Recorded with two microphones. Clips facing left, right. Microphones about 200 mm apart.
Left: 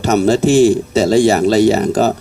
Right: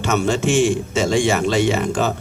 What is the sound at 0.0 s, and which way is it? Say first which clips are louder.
A man's voice: left 7 dB; 35° left (ahead or behind).